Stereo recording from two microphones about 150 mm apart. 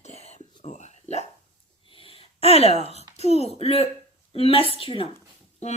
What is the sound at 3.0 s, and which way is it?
A child's voice, 45° left (ahead or behind).